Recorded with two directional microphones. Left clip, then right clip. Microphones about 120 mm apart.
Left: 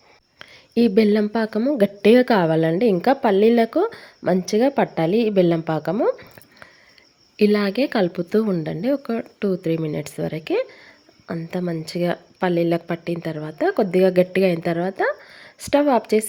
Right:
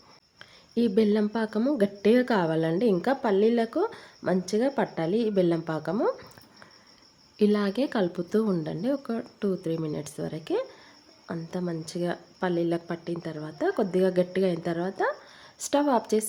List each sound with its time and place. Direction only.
0.3 s a sound: 40° left (ahead or behind)
1.3 s a woman's voice: 35° left (ahead or behind)
6.0 s speech: 15° left (ahead or behind)
7.3 s a woman's voice: 25° left (ahead or behind)